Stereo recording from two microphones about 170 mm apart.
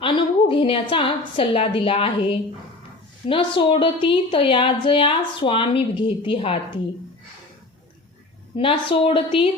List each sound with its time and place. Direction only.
0.0 s a woman's voice: 30° left (ahead or behind)
8.5 s a woman's voice: 30° left (ahead or behind)